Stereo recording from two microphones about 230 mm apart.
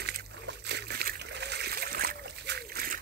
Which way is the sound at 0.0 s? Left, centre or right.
Right.